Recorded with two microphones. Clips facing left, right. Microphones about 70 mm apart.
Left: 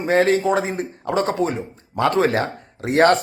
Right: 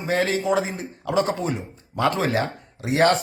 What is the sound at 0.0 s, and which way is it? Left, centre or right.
Speech, left.